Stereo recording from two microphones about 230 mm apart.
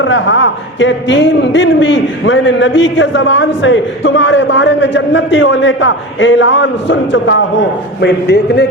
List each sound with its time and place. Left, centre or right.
0.0 s a man's voice: left